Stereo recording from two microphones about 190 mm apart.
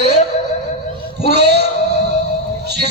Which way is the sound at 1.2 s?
60° right (ahead or behind).